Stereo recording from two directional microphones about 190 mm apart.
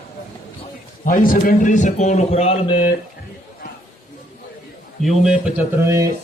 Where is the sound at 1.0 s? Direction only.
45° left (ahead or behind); by 2.8 s 30° left (ahead or behind).